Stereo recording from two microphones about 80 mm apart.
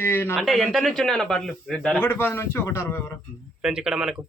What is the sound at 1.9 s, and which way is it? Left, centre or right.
A man's voice, left.